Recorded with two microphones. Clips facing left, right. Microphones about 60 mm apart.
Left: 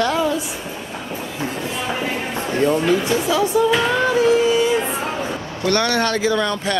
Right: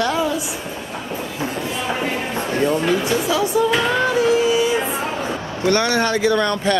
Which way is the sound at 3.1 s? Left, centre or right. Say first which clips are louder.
Left 1 dB; centre.